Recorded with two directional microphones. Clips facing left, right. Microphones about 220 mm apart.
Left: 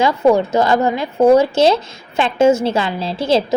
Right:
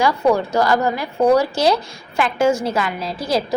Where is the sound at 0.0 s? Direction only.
20° left (ahead or behind).